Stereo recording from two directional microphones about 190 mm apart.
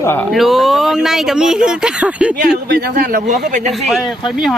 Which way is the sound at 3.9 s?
Centre (ahead or behind).